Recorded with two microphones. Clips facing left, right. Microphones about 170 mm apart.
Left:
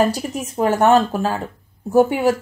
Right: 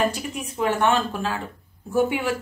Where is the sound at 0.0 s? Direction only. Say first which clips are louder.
Left 5 dB; 40° left (ahead or behind).